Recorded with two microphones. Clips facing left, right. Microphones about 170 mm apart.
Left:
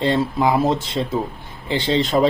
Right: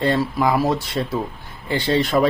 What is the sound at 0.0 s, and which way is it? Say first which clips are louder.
Speech: left 1 dB; 20° left (ahead or behind).